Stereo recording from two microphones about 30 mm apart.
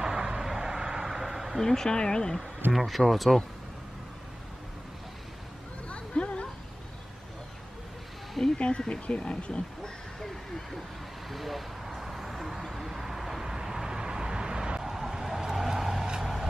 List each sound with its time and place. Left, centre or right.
0.0 s vehicle: right
0.4 s a sound: centre
1.6 s speech: centre
1.9 s speech: left
2.7 s speech: centre
5.9 s a sound: left
8.5 s a sound: left
9.0 s speech: left
11.2 s speech: centre
12.0 s vehicle: centre; by 14.8 s right
14.8 s vehicle: centre